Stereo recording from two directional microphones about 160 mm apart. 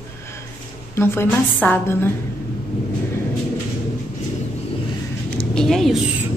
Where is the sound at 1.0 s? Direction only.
10° left (ahead or behind).